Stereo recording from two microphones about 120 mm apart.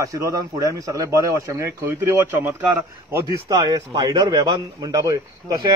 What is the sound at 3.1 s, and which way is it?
A man's voice, 30° right (ahead or behind).